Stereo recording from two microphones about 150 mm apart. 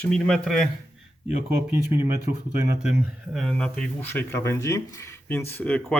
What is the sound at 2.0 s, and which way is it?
Speech, 80° right.